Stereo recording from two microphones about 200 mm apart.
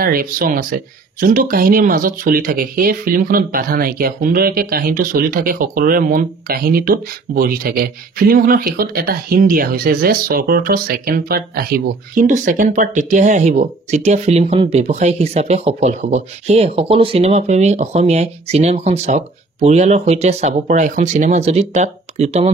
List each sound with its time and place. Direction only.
0.0 s speech: 45° right (ahead or behind)